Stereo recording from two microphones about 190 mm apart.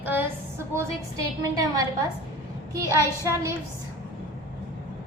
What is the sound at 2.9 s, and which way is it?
Speech, 15° right (ahead or behind).